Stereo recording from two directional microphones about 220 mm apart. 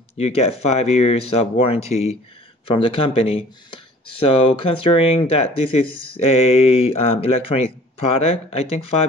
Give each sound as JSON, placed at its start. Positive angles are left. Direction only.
{"t": 0.2, "sound": "speech", "side_deg": 30}